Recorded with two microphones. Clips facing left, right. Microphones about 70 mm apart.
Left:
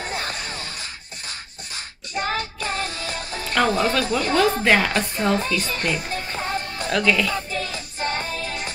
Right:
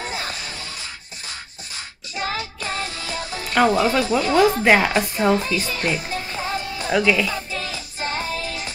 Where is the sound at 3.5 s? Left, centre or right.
Centre.